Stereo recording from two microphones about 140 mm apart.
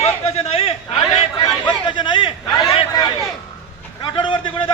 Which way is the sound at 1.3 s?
30° left (ahead or behind).